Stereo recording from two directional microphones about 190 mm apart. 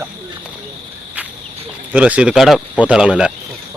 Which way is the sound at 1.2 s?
10° right (ahead or behind).